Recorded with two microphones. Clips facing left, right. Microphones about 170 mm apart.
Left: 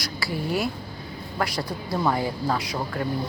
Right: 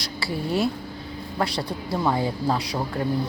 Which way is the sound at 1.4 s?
30° right (ahead or behind).